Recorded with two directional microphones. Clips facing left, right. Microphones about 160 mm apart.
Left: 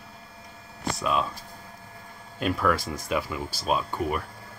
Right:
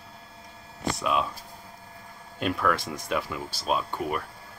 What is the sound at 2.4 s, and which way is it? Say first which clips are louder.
Speech: left 1 dB; centre (ahead or behind).